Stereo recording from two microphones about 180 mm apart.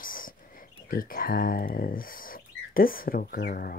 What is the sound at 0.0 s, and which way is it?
Speech, 50° left (ahead or behind).